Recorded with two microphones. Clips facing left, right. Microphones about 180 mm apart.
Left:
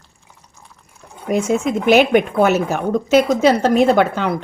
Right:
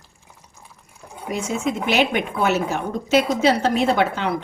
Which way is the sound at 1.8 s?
50° left (ahead or behind).